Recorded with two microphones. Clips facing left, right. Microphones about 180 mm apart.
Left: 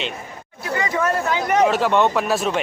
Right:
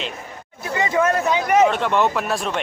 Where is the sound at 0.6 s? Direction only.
25° right (ahead or behind).